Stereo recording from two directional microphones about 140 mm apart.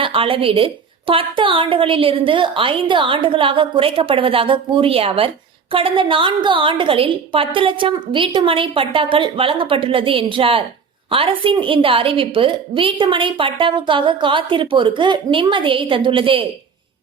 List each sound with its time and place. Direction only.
0.0 s a woman's voice: 40° right (ahead or behind)